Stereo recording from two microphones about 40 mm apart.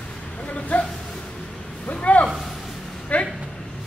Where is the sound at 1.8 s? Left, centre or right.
Left.